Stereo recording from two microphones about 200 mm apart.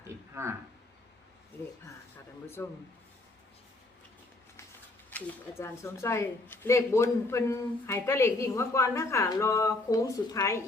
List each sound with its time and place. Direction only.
0.4 s speech: 15° right (ahead or behind)
2.6 s speech: 15° left (ahead or behind)
5.1 s speech: 10° left (ahead or behind)